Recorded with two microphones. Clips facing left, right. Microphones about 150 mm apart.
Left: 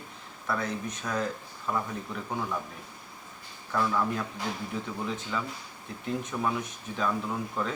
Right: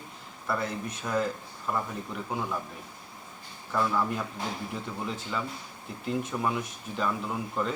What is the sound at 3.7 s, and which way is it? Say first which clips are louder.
Speech: even; 5° right (ahead or behind).